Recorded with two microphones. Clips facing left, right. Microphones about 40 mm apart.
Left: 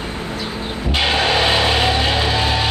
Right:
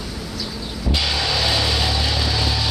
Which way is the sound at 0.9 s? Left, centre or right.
Left.